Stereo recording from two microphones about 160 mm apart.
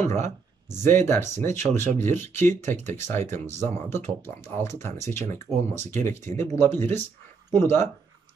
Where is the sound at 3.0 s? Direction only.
15° left (ahead or behind).